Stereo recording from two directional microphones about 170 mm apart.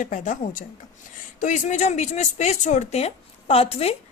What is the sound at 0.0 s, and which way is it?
Speech, 50° left (ahead or behind).